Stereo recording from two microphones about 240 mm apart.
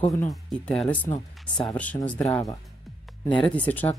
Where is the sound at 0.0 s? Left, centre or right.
Centre.